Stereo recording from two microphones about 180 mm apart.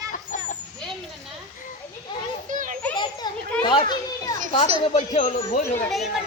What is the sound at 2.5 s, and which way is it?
Children playing, 45° right (ahead or behind).